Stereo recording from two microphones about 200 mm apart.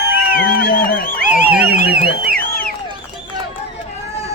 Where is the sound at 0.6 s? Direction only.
45° left (ahead or behind).